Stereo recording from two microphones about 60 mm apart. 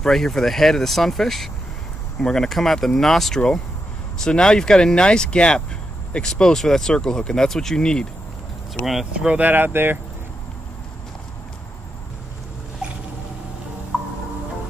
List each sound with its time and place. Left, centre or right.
0.0 s speech: centre
9.4 s speech: right
13.9 s music: centre